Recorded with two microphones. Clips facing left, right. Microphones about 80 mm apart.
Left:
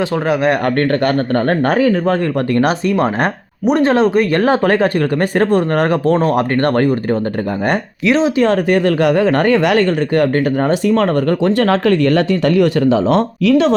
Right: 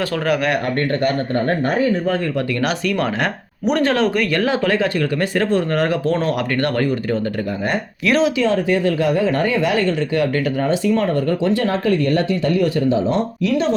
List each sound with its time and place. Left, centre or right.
0.3 s speech: left
0.6 s speech: left
2.5 s speech: left
8.0 s speech: left
8.4 s speech: left
10.3 s speech: left